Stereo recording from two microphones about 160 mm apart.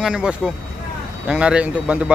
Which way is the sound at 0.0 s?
5° right (ahead or behind).